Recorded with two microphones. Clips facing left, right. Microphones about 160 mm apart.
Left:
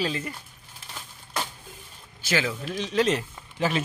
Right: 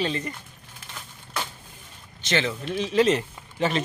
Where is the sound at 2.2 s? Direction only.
5° left (ahead or behind).